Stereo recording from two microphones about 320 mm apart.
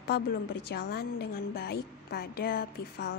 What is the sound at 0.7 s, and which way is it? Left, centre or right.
A woman's voice, left.